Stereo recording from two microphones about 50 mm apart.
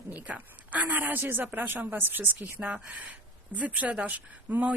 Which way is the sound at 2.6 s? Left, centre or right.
Right.